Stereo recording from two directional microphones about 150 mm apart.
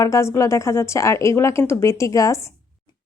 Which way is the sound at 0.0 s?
20° left (ahead or behind).